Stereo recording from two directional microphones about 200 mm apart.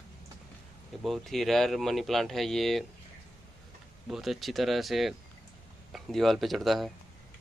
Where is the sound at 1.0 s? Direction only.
Centre (ahead or behind).